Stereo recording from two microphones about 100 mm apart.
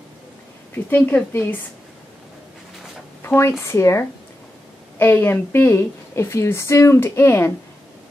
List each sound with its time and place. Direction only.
0.8 s a woman's voice: 20° left (ahead or behind)
3.2 s a woman's voice: 25° left (ahead or behind)